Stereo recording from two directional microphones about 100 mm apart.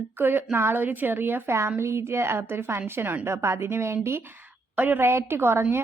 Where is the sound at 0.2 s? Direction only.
20° right (ahead or behind).